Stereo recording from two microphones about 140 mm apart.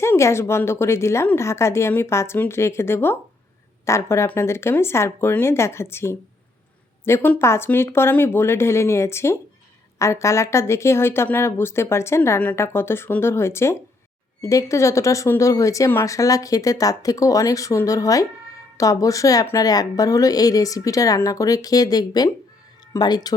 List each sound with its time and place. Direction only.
0.0 s speech: 20° left (ahead or behind)